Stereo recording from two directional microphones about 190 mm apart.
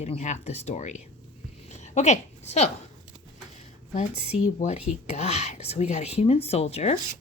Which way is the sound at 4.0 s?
40° left (ahead or behind).